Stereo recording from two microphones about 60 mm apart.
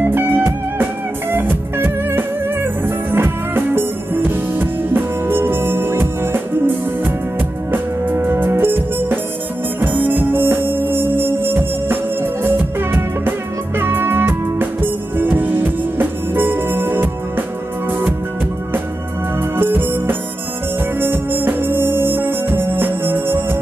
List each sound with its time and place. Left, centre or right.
0.0 s music: right
19.5 s music: right